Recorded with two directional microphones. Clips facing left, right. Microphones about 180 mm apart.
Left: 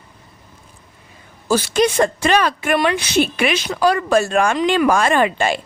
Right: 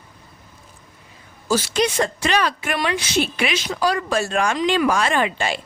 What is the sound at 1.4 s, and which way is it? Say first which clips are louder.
A woman's voice: left 4 dB; 55° left (ahead or behind).